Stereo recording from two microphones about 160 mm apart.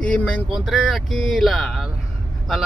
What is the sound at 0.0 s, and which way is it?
Speech, 5° left (ahead or behind).